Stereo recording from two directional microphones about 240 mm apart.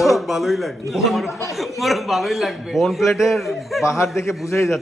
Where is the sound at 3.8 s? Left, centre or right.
Centre.